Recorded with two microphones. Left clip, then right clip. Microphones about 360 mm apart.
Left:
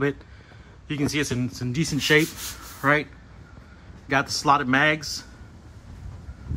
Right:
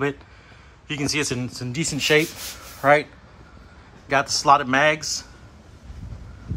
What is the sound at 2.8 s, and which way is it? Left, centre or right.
Speech, centre.